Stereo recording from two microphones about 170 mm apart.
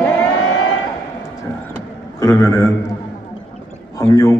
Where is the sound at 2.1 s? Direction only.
15° left (ahead or behind).